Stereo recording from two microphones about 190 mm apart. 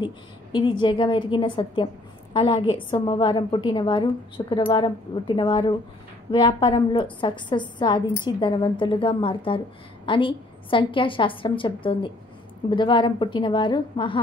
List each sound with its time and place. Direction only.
0.0 s a woman's voice: 25° left (ahead or behind)